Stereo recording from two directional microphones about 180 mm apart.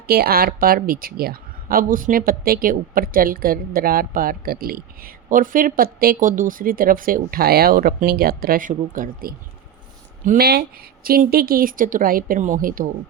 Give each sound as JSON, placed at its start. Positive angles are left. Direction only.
{"t": 0.1, "sound": "a woman's voice", "side_deg": -60}
{"t": 10.2, "sound": "a woman's voice", "side_deg": -60}